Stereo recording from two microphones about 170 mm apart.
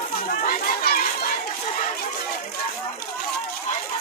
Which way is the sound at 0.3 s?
55° left (ahead or behind).